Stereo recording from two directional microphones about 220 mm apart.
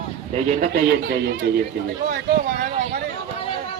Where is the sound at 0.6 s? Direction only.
45° right (ahead or behind).